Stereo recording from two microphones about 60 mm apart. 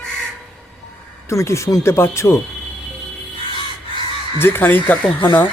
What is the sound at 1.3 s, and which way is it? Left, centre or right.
Speech, left.